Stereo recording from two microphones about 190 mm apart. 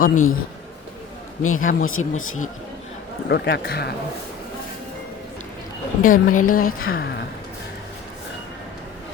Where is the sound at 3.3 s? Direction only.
60° left (ahead or behind).